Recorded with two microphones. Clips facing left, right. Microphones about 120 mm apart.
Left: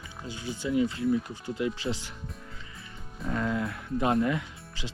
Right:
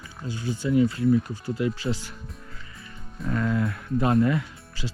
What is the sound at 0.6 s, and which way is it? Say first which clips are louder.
Speech: right 5 dB; 35° right (ahead or behind).